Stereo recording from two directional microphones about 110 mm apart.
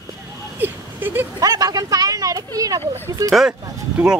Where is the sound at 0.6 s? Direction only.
20° right (ahead or behind).